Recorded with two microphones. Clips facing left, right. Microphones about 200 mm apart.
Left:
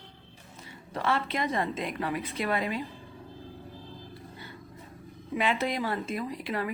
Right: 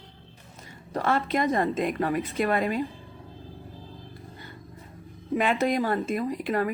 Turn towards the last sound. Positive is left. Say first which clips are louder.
# right 6 dB
turn(degrees=-45)  # may be behind; listen again after turning